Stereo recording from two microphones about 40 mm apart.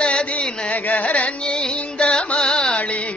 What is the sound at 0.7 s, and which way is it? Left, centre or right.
Music, left.